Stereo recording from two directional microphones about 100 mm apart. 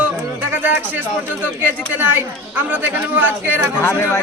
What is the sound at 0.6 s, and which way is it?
Speech, 20° right (ahead or behind).